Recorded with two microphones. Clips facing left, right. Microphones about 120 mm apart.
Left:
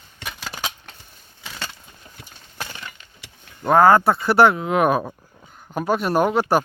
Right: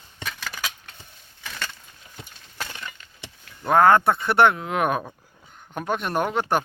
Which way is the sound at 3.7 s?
5° left (ahead or behind).